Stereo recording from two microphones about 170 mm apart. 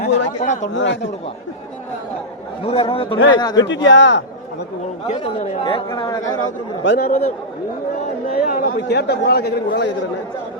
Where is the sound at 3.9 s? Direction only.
90° left.